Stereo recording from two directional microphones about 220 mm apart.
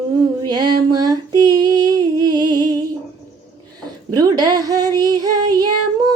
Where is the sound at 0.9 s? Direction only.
15° right (ahead or behind).